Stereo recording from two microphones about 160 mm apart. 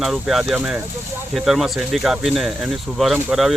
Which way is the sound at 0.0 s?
Centre (ahead or behind).